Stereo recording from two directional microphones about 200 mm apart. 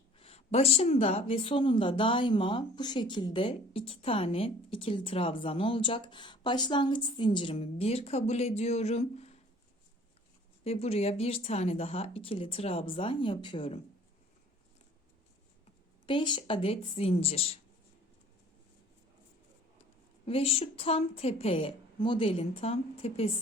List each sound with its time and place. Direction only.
0.2 s speech: 30° left (ahead or behind)
10.6 s speech: 30° left (ahead or behind)
16.0 s speech: 25° left (ahead or behind)
20.2 s speech: 30° left (ahead or behind)